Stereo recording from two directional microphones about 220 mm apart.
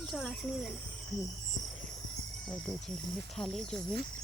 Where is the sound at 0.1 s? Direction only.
Centre (ahead or behind).